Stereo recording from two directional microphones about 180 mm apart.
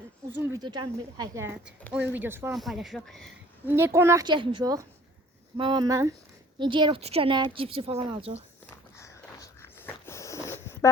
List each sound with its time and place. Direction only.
0.3 s a child's voice: 10° right (ahead or behind)
0.6 s a child's voice: 25° right (ahead or behind)
2.5 s speech: centre (ahead or behind)
3.7 s a child's voice: 15° right (ahead or behind); by 8.4 s 30° right (ahead or behind)
9.0 s a sound: 15° left (ahead or behind)